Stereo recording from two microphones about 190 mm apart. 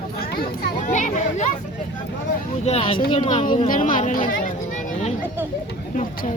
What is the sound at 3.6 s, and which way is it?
Speech, 45° left (ahead or behind).